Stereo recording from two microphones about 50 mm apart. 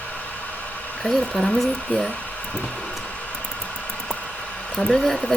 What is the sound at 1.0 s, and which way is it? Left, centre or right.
Speech, centre.